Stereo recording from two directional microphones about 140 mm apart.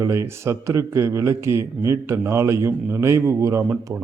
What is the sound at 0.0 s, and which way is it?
A man's voice, 20° right (ahead or behind).